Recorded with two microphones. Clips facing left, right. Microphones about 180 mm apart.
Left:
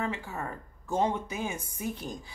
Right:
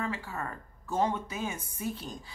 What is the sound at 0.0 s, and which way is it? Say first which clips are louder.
A woman's voice: left 1 dB; 15° left (ahead or behind).